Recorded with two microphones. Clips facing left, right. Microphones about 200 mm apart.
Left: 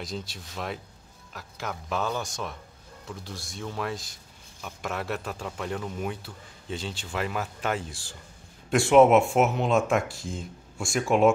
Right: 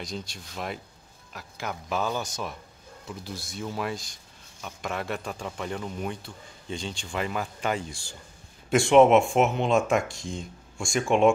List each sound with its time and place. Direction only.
0.0 s speech: centre (ahead or behind)